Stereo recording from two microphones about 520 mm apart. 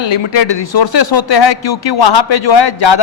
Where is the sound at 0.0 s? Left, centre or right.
Left.